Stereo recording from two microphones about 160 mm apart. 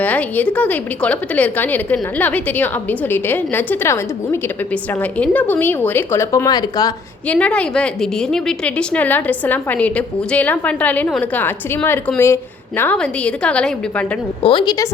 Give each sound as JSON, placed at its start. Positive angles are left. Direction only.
{"t": 0.0, "sound": "a woman's voice", "side_deg": 10}
{"t": 7.3, "sound": "a woman's voice", "side_deg": 10}
{"t": 14.4, "sound": "a woman's voice", "side_deg": 30}